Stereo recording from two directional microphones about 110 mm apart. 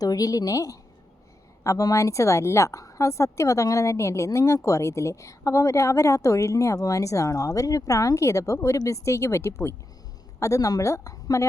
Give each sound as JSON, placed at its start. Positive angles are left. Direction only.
{"t": 0.0, "sound": "a woman's voice", "side_deg": 35}